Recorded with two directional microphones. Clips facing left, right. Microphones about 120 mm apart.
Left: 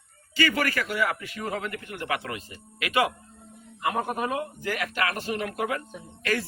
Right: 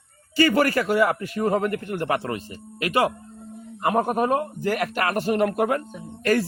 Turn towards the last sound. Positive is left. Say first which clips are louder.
# right 7 dB
turn(degrees=-45)  # may be behind; listen again after turning